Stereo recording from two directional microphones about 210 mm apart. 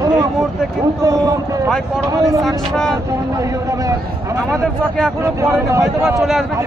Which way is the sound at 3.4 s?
15° right (ahead or behind).